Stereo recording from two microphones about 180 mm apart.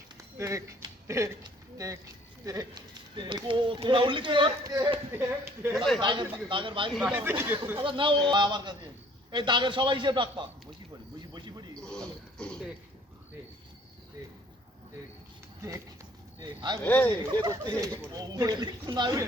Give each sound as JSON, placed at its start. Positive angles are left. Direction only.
{"t": 0.3, "sound": "speech", "side_deg": -15}
{"t": 5.7, "sound": "speech", "side_deg": 0}
{"t": 6.0, "sound": "speech", "side_deg": -25}
{"t": 7.2, "sound": "speech", "side_deg": -10}
{"t": 7.8, "sound": "speech", "side_deg": -30}
{"t": 11.3, "sound": "a sound", "side_deg": -25}
{"t": 11.8, "sound": "a sound", "side_deg": 5}
{"t": 16.4, "sound": "speech", "side_deg": -20}
{"t": 16.8, "sound": "speech", "side_deg": 10}
{"t": 17.4, "sound": "speech", "side_deg": -20}